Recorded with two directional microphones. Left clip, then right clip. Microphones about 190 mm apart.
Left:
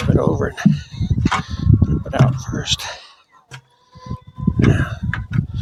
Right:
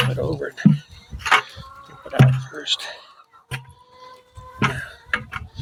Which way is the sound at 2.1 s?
35° left (ahead or behind).